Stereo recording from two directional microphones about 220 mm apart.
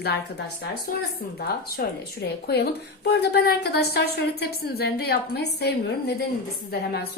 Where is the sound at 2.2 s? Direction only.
45° left (ahead or behind).